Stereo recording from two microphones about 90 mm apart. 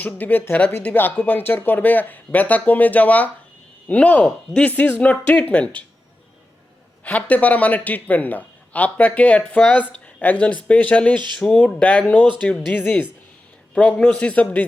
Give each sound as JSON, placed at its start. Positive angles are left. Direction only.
{"t": 0.0, "sound": "a man's voice", "side_deg": 20}
{"t": 7.0, "sound": "a man's voice", "side_deg": 15}